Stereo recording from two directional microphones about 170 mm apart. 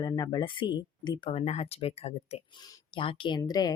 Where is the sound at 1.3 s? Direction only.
40° left (ahead or behind).